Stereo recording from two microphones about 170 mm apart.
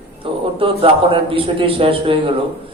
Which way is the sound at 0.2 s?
30° right (ahead or behind).